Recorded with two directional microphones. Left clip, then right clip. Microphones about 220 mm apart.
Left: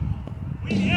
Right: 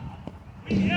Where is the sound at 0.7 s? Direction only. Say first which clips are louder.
Left 1 dB; 55° left (ahead or behind).